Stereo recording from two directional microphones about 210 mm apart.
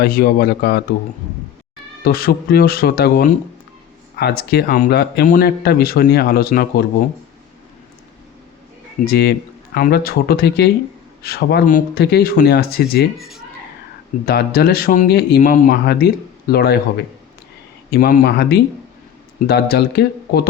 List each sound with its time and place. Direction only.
0.0 s speech: 45° left (ahead or behind)
2.0 s speech: 45° left (ahead or behind)
9.0 s speech: 50° left (ahead or behind)
13.1 s speech: centre (ahead or behind)
14.3 s speech: 45° left (ahead or behind)
17.9 s speech: 45° left (ahead or behind)